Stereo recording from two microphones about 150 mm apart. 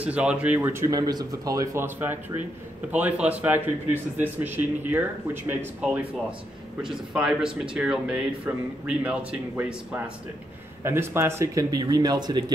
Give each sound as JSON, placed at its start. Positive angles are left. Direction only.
{"t": 0.0, "sound": "speech", "side_deg": -10}
{"t": 7.7, "sound": "speech", "side_deg": -5}